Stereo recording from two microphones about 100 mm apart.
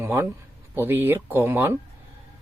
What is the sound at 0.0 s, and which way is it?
A man's voice, 25° right (ahead or behind).